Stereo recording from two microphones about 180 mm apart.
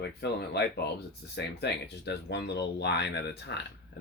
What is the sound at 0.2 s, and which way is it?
Speech, 70° left (ahead or behind).